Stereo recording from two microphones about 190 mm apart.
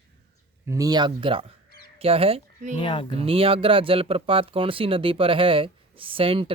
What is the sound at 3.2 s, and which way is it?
Speech, 30° right (ahead or behind).